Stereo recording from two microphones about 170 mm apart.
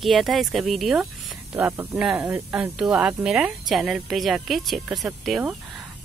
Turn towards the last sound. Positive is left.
turn(degrees=-5)  # may be behind; listen again after turning